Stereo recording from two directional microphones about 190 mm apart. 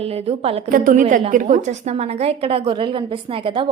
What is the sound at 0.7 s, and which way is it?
A woman's voice, 45° right (ahead or behind).